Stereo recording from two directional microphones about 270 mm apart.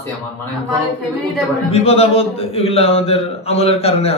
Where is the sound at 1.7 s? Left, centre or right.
Left.